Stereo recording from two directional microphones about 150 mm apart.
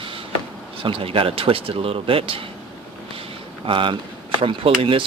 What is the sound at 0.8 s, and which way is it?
Speech, 35° right (ahead or behind).